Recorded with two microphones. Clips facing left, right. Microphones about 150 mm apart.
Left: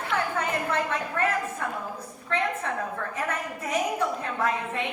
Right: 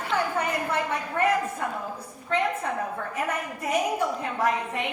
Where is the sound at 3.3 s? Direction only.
10° right (ahead or behind).